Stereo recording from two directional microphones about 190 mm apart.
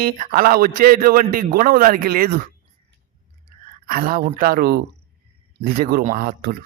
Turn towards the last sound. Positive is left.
turn(degrees=-50)  # may be behind; listen again after turning